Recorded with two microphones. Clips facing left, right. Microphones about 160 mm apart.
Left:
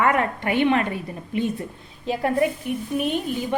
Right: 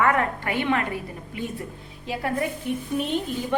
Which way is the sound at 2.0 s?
25° left (ahead or behind).